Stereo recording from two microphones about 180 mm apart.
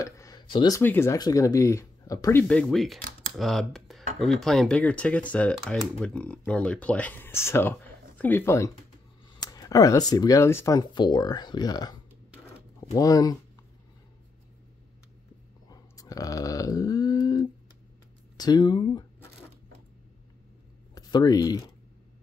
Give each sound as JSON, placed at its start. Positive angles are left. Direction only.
{"t": 0.0, "sound": "a sound", "side_deg": 20}
{"t": 0.8, "sound": "speech", "side_deg": 15}
{"t": 2.4, "sound": "speech", "side_deg": 5}
{"t": 15.7, "sound": "burping", "side_deg": 20}
{"t": 18.4, "sound": "speech", "side_deg": 25}
{"t": 20.9, "sound": "speech", "side_deg": 20}